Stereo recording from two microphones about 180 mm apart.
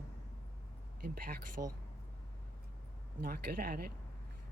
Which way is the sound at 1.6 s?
45° right (ahead or behind).